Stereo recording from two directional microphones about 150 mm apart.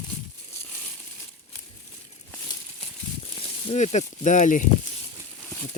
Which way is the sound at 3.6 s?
50° left (ahead or behind).